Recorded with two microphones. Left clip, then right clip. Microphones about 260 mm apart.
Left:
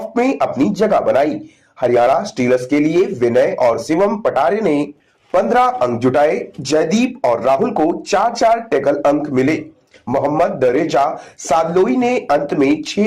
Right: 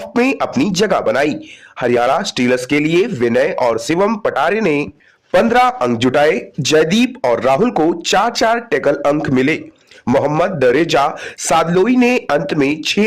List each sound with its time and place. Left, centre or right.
0.1 s a man's voice: right